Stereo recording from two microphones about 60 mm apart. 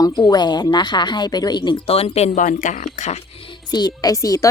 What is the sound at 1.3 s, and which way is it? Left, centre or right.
Speech, left.